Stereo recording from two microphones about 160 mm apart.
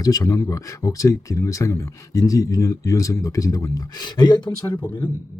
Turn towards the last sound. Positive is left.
turn(degrees=10)  # may be behind; listen again after turning